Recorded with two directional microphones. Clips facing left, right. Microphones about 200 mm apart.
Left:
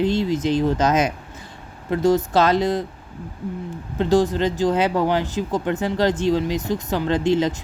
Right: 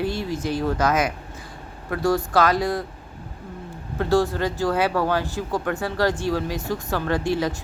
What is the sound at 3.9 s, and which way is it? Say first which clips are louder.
A woman's voice: left 3 dB; 20° left (ahead or behind).